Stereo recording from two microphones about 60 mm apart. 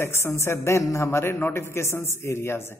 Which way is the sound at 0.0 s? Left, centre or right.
Left.